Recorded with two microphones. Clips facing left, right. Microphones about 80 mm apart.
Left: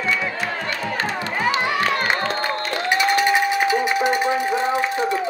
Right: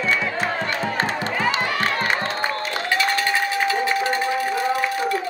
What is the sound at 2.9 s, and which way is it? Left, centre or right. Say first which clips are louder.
Music: left 4 dB; centre.